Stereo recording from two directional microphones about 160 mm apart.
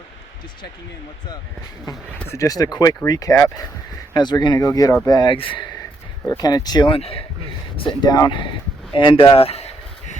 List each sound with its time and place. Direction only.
2.1 s speech: 15° left (ahead or behind); by 9.6 s 35° left (ahead or behind)